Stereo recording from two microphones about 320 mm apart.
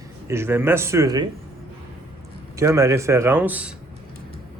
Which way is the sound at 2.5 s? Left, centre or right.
Centre.